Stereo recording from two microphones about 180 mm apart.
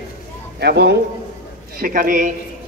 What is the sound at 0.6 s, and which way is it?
Speech, 65° right (ahead or behind).